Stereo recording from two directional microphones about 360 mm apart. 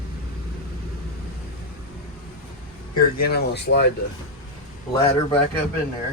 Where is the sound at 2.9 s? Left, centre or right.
Left.